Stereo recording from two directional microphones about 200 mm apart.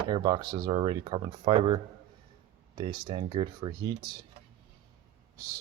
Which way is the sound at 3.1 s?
30° right (ahead or behind).